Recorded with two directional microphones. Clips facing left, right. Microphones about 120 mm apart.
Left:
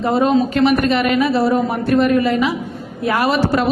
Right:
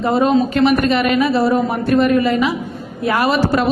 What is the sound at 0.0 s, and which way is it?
A woman's voice, 20° right (ahead or behind).